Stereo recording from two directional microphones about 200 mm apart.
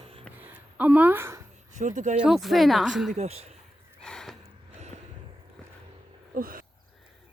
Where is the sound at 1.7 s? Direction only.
35° right (ahead or behind).